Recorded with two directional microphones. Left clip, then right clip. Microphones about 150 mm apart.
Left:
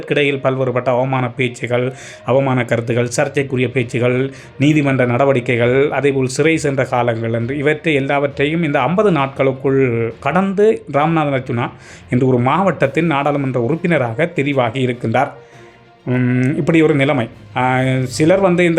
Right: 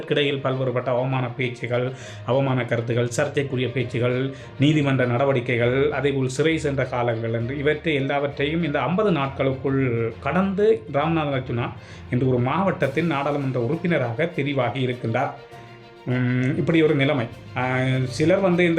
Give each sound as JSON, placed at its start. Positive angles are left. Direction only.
{"t": 0.1, "sound": "speech", "side_deg": 35}
{"t": 16.0, "sound": "speech", "side_deg": 40}